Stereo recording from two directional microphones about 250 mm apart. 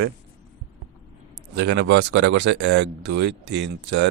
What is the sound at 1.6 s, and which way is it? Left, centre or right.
Speech, right.